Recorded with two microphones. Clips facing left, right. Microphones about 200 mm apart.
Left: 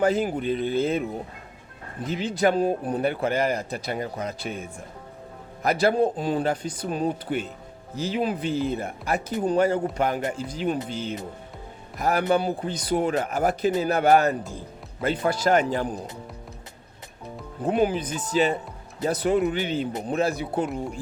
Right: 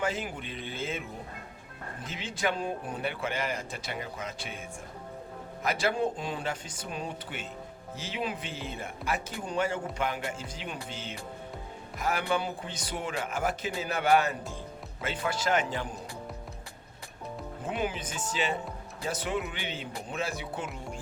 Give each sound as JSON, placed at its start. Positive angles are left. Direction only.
{"t": 0.0, "sound": "speech", "side_deg": 40}
{"t": 2.0, "sound": "speech", "side_deg": 40}
{"t": 5.6, "sound": "speech", "side_deg": 40}
{"t": 17.7, "sound": "speech", "side_deg": 40}